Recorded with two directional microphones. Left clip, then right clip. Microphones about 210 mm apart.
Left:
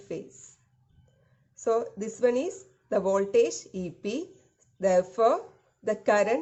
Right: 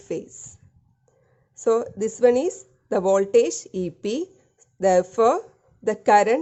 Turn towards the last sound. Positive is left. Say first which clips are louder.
# right 7 dB
turn(degrees=-45)  # may be behind; listen again after turning